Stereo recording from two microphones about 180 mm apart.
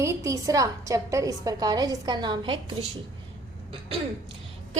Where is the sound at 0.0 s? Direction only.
15° right (ahead or behind).